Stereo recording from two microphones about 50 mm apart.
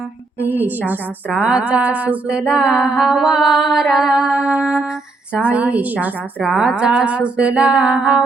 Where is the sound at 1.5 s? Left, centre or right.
Right.